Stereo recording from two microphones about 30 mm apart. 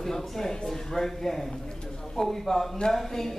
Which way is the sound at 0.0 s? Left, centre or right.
Centre.